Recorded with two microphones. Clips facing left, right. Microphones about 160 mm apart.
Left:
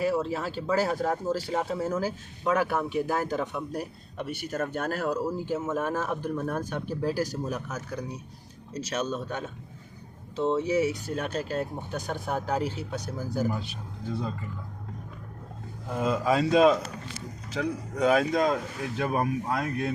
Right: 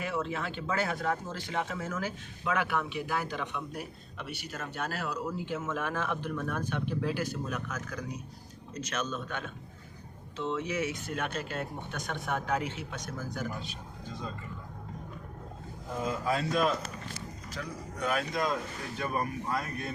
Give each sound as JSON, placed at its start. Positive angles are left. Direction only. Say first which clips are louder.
{"t": 0.0, "sound": "speech", "louder": "left 6 dB", "side_deg": 35}
{"t": 16.0, "sound": "speech", "louder": "left 6 dB", "side_deg": 85}